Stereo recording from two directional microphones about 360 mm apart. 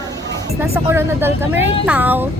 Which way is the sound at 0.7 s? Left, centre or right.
Centre.